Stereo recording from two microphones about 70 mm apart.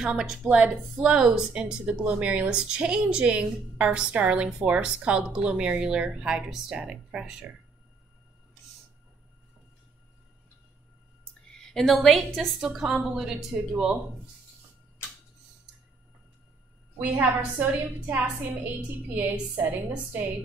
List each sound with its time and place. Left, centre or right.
0.2 s speech: centre
11.5 s a woman's voice: centre
13.5 s speech: centre
17.0 s a woman's voice: right
19.5 s a woman's voice: right